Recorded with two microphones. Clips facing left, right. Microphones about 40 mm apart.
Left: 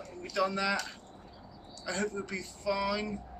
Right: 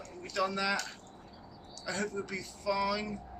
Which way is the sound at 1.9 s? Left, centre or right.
Left.